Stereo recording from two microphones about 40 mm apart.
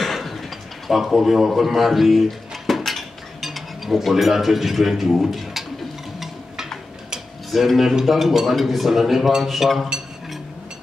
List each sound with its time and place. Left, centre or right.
0.0 s a sound: centre
0.8 s speech: centre
2.9 s dishes: centre
5.1 s speech: centre
6.1 s a sound: centre
7.5 s speech: centre